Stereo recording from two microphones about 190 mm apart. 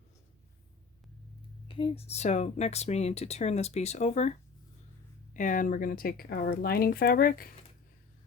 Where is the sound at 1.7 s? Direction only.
30° left (ahead or behind); by 7.5 s 50° left (ahead or behind).